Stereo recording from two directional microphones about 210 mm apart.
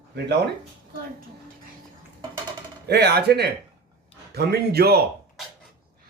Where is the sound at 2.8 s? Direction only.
50° right (ahead or behind).